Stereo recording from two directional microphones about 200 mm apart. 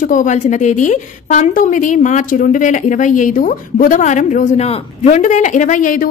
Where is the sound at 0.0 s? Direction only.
40° left (ahead or behind).